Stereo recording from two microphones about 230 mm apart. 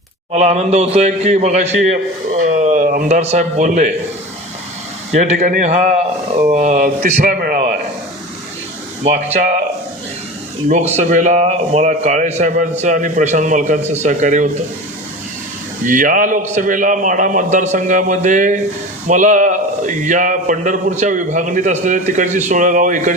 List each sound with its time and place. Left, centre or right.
0.3 s a man's voice: right
5.1 s a man's voice: right
9.0 s a man's voice: right
10.7 s a man's voice: right
15.8 s a man's voice: right